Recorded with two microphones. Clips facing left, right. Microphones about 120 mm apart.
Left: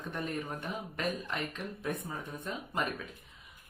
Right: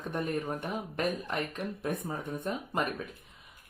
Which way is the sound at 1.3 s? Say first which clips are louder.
Right 4 dB; 50° right (ahead or behind).